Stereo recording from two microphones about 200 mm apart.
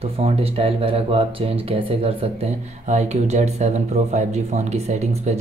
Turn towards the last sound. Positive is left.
turn(degrees=-35)  # may be behind; listen again after turning